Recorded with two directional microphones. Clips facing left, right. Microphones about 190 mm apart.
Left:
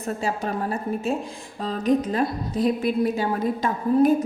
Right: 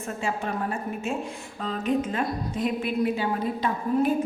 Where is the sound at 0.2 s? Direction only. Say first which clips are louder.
Left 2 dB; 40° left (ahead or behind).